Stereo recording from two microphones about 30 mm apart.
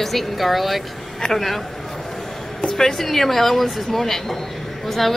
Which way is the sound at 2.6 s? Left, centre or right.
Centre.